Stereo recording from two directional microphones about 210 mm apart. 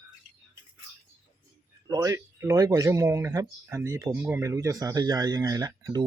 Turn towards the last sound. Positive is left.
turn(degrees=-20)  # may be behind; listen again after turning